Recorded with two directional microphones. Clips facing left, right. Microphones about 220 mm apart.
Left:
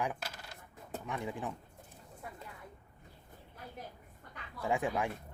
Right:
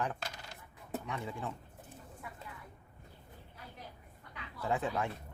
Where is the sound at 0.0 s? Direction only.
10° left (ahead or behind).